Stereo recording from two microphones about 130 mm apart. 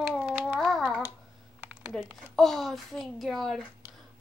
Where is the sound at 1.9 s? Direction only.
Centre (ahead or behind).